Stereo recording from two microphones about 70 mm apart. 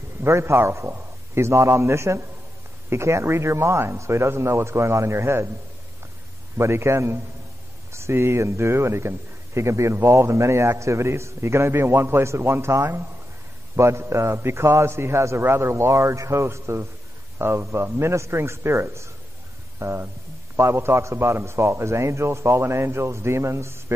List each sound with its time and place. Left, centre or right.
0.2 s a man's voice: right
6.5 s a man's voice: right